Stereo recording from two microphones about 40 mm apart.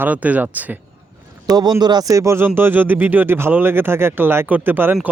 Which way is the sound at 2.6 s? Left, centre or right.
Right.